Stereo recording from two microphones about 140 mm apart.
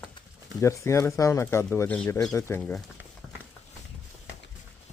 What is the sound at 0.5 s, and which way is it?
Speech, 20° left (ahead or behind).